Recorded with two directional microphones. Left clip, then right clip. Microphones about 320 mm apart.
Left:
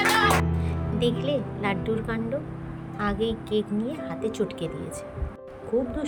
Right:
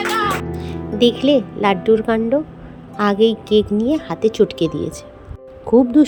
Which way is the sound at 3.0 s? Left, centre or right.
Centre.